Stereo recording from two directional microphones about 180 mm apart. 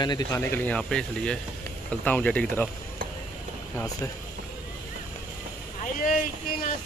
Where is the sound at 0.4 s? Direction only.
10° left (ahead or behind).